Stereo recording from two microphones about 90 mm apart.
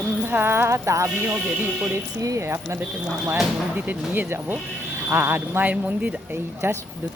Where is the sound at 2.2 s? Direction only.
35° right (ahead or behind).